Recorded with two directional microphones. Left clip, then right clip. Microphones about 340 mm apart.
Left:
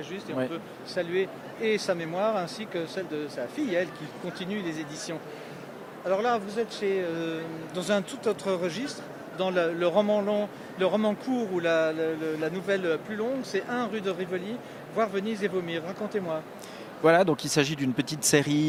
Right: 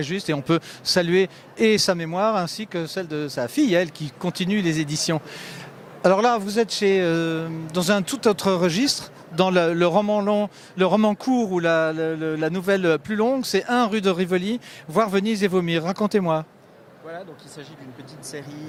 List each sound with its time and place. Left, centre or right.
0.0 s a man's voice: right
6.1 s a man's voice: right
17.1 s speech: left